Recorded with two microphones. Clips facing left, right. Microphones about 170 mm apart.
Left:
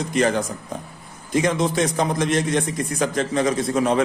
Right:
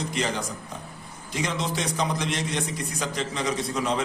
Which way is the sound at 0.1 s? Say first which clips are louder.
Left 8 dB; 55° left (ahead or behind).